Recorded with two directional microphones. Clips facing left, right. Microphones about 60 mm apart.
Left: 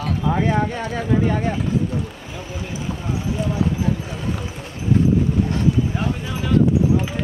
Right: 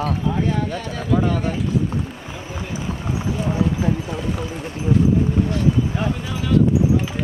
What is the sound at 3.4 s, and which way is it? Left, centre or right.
Speech, right.